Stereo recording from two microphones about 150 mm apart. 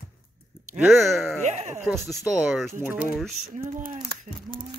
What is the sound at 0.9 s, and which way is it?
Speech, centre (ahead or behind).